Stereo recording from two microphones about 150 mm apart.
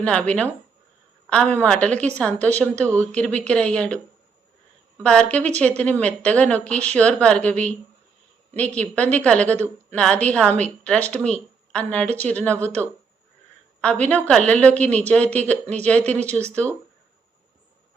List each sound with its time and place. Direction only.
0.0 s a woman's voice: 10° left (ahead or behind)
5.0 s a woman's voice: 5° left (ahead or behind)
14.1 s a woman's voice: 5° left (ahead or behind)